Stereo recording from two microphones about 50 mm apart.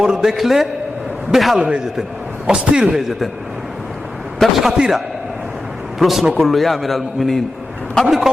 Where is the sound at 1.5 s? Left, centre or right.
Centre.